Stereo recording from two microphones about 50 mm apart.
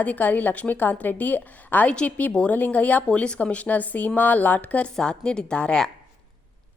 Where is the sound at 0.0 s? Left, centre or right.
Left.